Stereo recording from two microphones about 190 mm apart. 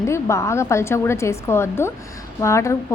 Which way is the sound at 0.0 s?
15° left (ahead or behind).